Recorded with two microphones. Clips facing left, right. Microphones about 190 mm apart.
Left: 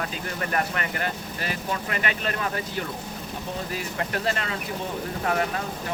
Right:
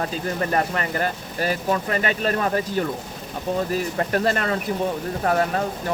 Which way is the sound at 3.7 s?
40° right (ahead or behind).